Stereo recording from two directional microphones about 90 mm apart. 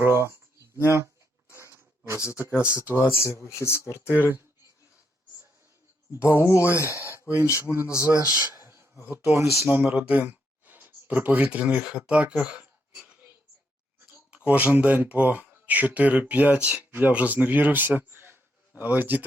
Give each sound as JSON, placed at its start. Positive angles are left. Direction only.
{"t": 0.0, "sound": "speech", "side_deg": -30}
{"t": 1.5, "sound": "pig", "side_deg": -30}
{"t": 2.2, "sound": "speech", "side_deg": 30}
{"t": 4.1, "sound": "speech", "side_deg": -20}
{"t": 6.1, "sound": "speech", "side_deg": 30}
{"t": 7.6, "sound": "speech", "side_deg": -20}
{"t": 8.1, "sound": "speech", "side_deg": 40}
{"t": 8.6, "sound": "speech", "side_deg": -30}
{"t": 9.6, "sound": "speech", "side_deg": -20}
{"t": 14.3, "sound": "speech", "side_deg": -15}